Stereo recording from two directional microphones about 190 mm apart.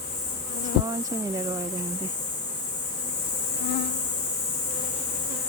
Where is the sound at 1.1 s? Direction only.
20° right (ahead or behind).